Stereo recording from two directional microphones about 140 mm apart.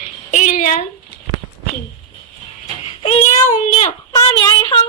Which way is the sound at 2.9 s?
50° left (ahead or behind).